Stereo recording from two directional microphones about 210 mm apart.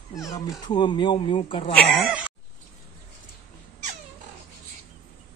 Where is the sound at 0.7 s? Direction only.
20° left (ahead or behind).